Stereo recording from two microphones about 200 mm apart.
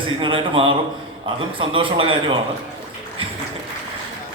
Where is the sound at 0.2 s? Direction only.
25° right (ahead or behind).